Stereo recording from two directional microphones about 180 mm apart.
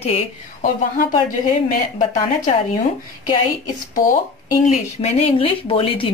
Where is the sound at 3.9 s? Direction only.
50° left (ahead or behind).